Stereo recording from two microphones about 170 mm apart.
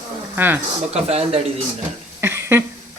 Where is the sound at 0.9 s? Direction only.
35° right (ahead or behind).